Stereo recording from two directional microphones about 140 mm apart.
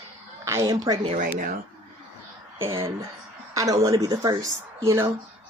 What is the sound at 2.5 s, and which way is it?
Speech, 20° right (ahead or behind).